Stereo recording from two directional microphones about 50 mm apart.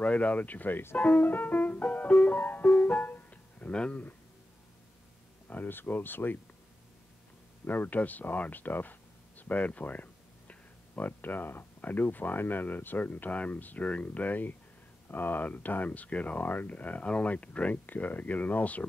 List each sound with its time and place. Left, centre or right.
0.0 s speech: left
0.9 s music: left
3.7 s speech: centre
5.5 s speech: left
7.6 s speech: left